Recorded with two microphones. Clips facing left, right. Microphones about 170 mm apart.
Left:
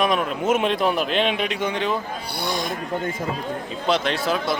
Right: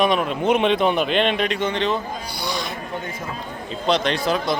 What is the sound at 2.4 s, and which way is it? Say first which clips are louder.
Owl: left 2 dB; 50° left (ahead or behind).